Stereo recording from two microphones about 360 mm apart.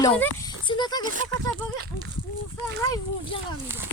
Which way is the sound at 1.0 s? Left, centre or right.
Right.